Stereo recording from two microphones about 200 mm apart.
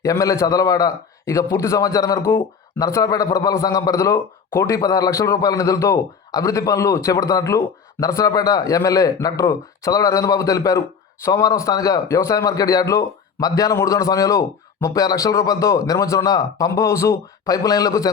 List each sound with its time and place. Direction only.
0.0 s a man's voice: 15° left (ahead or behind)